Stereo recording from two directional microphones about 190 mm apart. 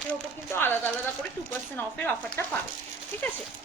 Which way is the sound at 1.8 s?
10° left (ahead or behind).